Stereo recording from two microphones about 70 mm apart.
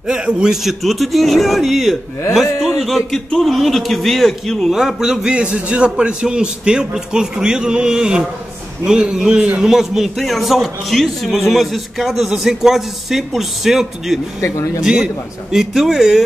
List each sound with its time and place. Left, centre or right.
0.0 s a man's voice: centre
14.4 s speech: left
14.8 s a man's voice: centre